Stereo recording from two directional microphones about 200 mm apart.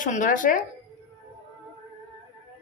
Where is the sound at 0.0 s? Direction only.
40° left (ahead or behind).